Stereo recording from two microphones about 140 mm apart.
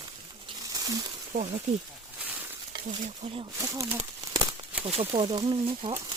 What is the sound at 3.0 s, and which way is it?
Speech, 55° right (ahead or behind).